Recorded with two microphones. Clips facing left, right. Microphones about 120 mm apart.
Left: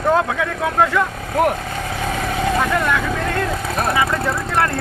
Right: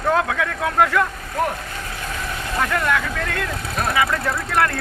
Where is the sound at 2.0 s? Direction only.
80° left.